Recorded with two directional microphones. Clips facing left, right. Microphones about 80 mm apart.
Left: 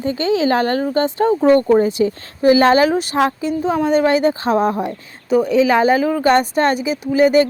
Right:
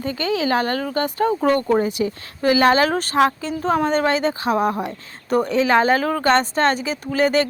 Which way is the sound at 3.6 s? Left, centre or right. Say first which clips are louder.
Even; right.